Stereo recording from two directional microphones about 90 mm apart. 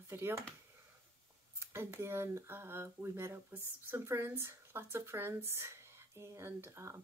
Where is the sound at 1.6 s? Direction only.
25° right (ahead or behind).